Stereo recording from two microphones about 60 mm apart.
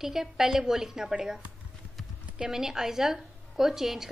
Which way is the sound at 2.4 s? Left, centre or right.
Centre.